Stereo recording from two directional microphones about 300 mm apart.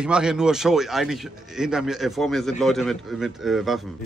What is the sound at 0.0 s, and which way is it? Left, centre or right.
Speech, centre.